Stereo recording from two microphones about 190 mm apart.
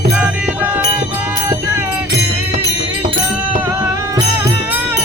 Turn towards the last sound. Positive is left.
turn(degrees=-15)  # may be behind; listen again after turning